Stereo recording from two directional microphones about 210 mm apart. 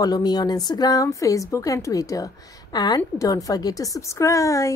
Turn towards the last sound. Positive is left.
turn(degrees=15)  # may be behind; listen again after turning